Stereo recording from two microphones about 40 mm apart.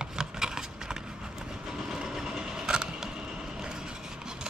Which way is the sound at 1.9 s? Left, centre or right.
Centre.